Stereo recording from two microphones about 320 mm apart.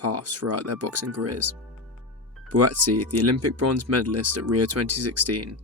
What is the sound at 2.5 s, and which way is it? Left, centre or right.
Speech, right.